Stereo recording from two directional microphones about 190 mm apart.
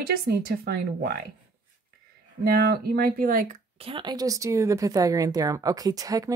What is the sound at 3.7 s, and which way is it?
A woman's voice, 30° right (ahead or behind).